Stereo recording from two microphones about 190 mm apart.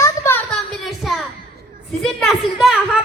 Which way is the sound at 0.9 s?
Centre (ahead or behind).